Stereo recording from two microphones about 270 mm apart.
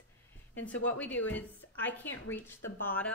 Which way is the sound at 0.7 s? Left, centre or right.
Centre.